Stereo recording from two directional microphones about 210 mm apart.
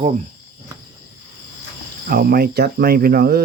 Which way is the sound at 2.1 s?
45° right (ahead or behind).